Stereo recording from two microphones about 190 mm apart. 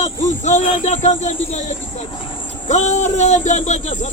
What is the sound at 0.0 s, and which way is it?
Speech, 40° left (ahead or behind).